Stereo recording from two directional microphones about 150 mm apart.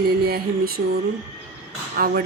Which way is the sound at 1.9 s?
90° right.